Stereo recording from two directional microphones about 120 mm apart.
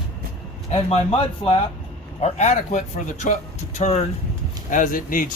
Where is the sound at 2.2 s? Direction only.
70° left (ahead or behind).